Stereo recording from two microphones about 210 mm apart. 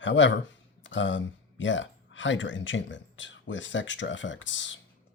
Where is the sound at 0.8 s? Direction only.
60° left (ahead or behind).